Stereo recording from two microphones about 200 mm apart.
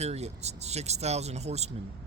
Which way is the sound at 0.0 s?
35° right (ahead or behind).